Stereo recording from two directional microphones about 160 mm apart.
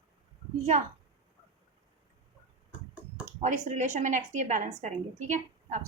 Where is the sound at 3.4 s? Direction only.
50° right (ahead or behind).